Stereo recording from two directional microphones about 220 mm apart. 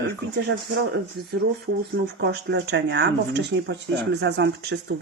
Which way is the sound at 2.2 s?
50° right (ahead or behind).